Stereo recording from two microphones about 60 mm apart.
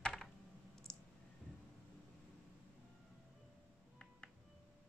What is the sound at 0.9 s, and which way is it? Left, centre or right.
Clicking, centre.